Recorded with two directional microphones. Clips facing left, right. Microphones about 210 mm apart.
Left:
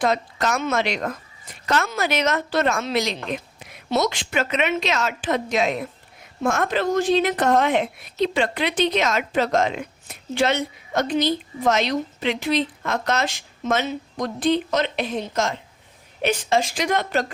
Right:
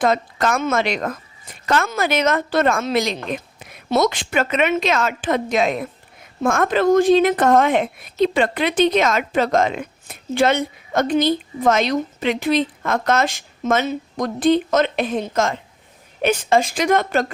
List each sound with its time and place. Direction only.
0.0 s a woman's voice: 50° right (ahead or behind)